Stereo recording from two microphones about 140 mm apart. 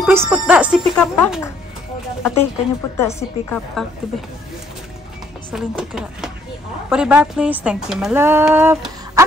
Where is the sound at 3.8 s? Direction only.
5° left (ahead or behind).